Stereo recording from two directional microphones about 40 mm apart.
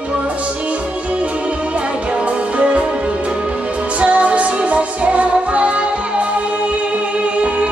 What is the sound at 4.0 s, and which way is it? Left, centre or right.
Music, right.